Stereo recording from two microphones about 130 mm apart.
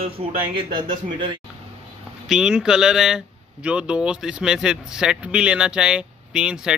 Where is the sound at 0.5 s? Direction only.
40° right (ahead or behind).